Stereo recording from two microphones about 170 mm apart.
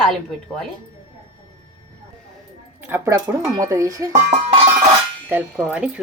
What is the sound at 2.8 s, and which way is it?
Speech, 15° right (ahead or behind).